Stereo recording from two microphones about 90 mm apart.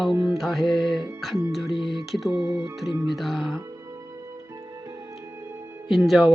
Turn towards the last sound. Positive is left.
turn(degrees=0)  # may be behind; listen again after turning